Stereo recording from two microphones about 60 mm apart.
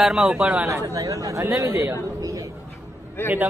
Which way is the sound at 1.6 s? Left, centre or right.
Right.